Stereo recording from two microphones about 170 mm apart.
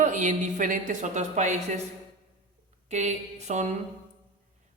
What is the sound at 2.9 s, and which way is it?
Speech, 40° right (ahead or behind).